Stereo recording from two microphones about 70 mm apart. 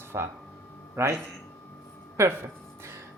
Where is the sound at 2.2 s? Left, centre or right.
Right.